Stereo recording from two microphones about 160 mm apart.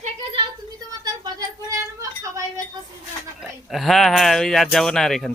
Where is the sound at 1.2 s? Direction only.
20° right (ahead or behind).